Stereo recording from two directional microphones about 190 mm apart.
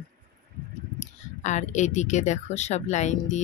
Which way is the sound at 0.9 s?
40° left (ahead or behind).